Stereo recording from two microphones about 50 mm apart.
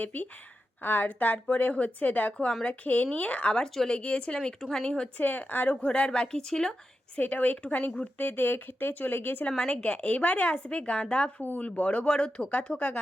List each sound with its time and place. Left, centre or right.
0.0 s a woman's voice: left; by 5.0 s centre
5.1 s speech: left
5.8 s a woman's voice: centre
7.2 s speech: left
9.6 s speech: centre
11.3 s speech: left
11.8 s speech: left